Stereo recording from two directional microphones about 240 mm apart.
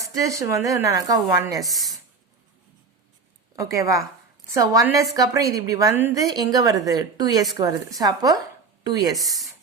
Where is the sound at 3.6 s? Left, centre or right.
Centre.